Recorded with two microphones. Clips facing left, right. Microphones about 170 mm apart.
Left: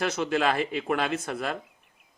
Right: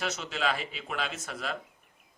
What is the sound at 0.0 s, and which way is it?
Speech, 55° left (ahead or behind).